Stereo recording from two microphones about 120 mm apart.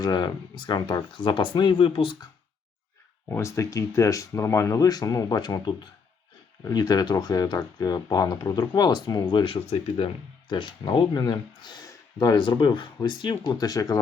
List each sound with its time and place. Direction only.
0.0 s speech: 40° left (ahead or behind)
3.2 s speech: 20° left (ahead or behind); by 9.6 s 45° left (ahead or behind)
9.6 s speech: 55° left (ahead or behind)
10.5 s speech: 40° left (ahead or behind)